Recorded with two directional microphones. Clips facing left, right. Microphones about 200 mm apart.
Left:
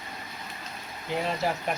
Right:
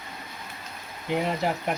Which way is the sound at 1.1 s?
15° right (ahead or behind).